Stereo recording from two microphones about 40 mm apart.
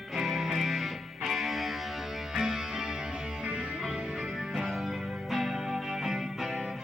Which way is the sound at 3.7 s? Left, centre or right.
Centre.